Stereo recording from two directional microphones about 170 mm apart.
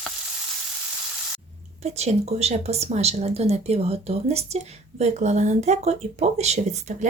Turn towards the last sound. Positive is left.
turn(degrees=-40)  # may be behind; listen again after turning